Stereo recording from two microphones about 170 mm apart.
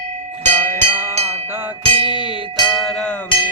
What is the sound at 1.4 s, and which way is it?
Music, 10° right (ahead or behind).